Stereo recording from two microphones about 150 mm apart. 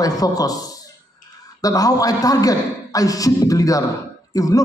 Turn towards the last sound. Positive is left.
turn(degrees=25)  # may be behind; listen again after turning